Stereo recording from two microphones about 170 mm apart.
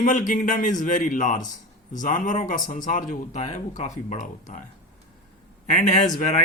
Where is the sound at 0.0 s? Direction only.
50° left (ahead or behind).